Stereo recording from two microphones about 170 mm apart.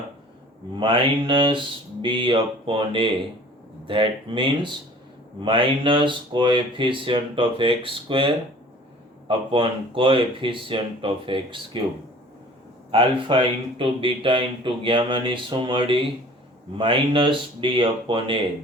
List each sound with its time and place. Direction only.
0.8 s speech: 30° right (ahead or behind)
12.9 s speech: 30° right (ahead or behind)